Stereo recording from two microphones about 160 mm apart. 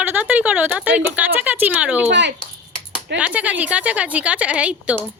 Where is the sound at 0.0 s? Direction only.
10° right (ahead or behind).